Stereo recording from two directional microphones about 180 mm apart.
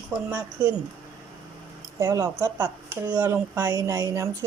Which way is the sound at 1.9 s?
15° right (ahead or behind).